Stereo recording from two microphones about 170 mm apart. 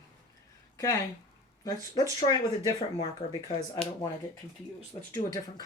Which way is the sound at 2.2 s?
25° left (ahead or behind).